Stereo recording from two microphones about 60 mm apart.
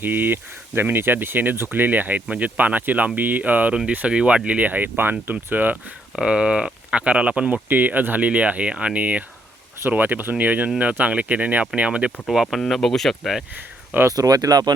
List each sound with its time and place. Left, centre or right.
0.0 s speech: right
6.1 s speech: centre
12.3 s speech: centre
13.6 s speech: right
14.1 s speech: right